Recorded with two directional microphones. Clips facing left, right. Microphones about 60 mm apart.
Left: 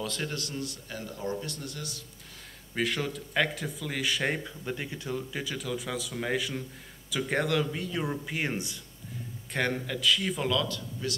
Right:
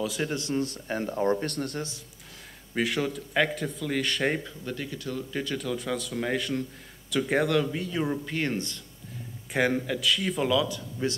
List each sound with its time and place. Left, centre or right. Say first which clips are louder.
0.0 s a man's voice: right 4 dB; centre
0.3 s a man's voice: right 7 dB; right
1.8 s a man's voice: right 6 dB; right
2.7 s speech: right 3 dB; centre
4.6 s speech: left 1 dB; centre
5.3 s speech: right 3 dB; centre
9.5 s speech: right 5 dB; centre
10.7 s a man's voice: right 4 dB; right